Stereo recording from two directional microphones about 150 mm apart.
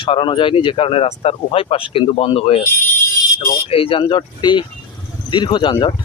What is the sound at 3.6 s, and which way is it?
Speech, 40° left (ahead or behind).